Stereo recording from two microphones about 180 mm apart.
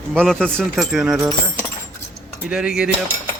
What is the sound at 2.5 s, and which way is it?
Speech, 5° right (ahead or behind).